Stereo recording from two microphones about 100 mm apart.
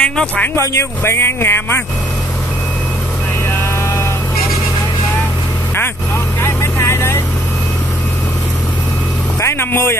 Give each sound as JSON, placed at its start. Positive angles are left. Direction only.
{"t": 0.0, "sound": "speech", "side_deg": 10}
{"t": 0.6, "sound": "speech", "side_deg": 25}
{"t": 3.4, "sound": "vehicle", "side_deg": 25}
{"t": 6.4, "sound": "vehicle", "side_deg": 25}
{"t": 9.4, "sound": "vehicle", "side_deg": 25}